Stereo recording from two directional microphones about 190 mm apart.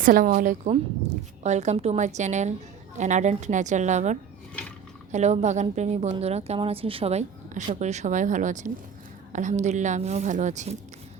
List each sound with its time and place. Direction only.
0.0 s a woman's voice: 45° right (ahead or behind)